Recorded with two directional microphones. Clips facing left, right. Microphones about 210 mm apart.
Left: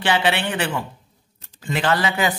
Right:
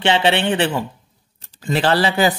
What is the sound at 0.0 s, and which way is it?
A man's voice, 25° right (ahead or behind).